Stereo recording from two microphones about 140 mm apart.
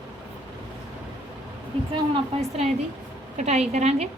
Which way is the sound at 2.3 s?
40° right (ahead or behind).